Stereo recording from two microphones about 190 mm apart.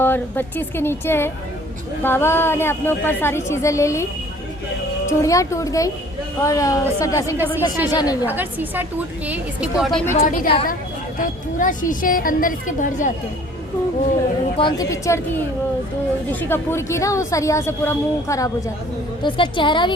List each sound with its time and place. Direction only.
0.0 s a woman's voice: 10° left (ahead or behind)
5.0 s a woman's voice: 15° left (ahead or behind)
7.3 s a woman's voice: 10° right (ahead or behind)
7.9 s a woman's voice: 20° left (ahead or behind)
8.3 s a woman's voice: 10° right (ahead or behind)
10.1 s a woman's voice: 40° left (ahead or behind)
14.5 s a woman's voice: 20° left (ahead or behind)